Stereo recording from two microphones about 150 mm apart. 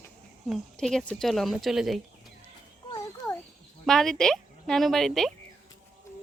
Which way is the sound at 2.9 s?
20° left (ahead or behind).